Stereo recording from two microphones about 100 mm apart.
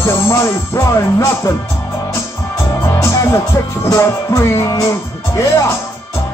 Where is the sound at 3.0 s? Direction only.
25° left (ahead or behind).